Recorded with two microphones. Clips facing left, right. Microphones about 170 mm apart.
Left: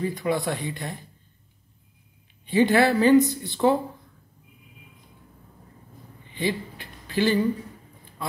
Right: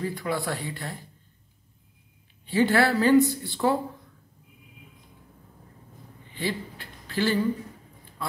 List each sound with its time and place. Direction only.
0.0 s speech: 20° left (ahead or behind)
2.4 s speech: 20° left (ahead or behind)
6.3 s a sound: 15° left (ahead or behind)